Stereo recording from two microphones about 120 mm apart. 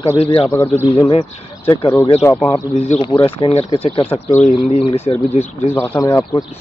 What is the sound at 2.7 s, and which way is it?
Speech, 70° left (ahead or behind).